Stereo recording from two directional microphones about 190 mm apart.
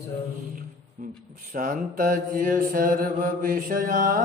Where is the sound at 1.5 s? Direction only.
45° right (ahead or behind).